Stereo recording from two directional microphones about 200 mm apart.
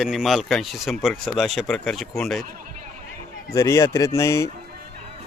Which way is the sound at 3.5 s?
15° left (ahead or behind).